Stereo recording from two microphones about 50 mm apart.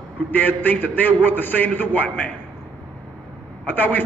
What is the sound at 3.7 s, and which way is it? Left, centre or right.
Speech, left.